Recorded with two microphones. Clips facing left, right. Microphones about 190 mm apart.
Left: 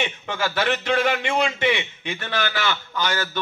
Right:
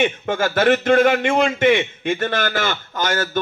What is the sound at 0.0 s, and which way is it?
A man's voice, 50° right (ahead or behind).